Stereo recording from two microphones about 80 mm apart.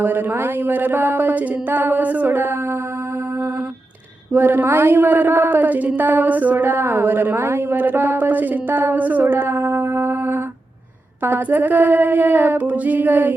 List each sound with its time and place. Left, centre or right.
0.0 s a woman's voice: right
4.3 s a woman's voice: right